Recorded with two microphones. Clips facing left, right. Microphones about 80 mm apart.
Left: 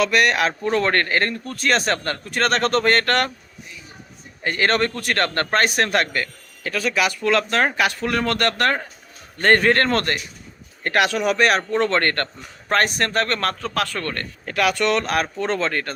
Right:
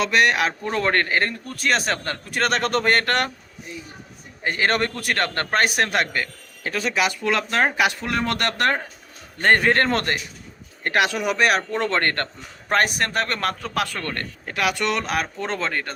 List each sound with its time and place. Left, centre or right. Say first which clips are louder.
0.0 s a man's voice: left 1 dB; right
4.4 s a man's voice: left 2 dB; centre
6.6 s a man's voice: left 1 dB; right; by 15.9 s centre